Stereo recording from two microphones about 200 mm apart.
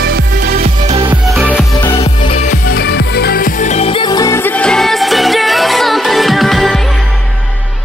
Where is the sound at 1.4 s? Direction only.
5° left (ahead or behind).